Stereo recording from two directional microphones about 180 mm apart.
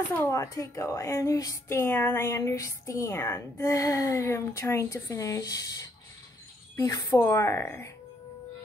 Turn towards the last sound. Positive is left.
turn(degrees=15)  # may be behind; listen again after turning